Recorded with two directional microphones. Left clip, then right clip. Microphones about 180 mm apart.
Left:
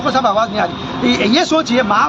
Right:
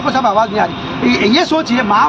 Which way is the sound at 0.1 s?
20° left (ahead or behind).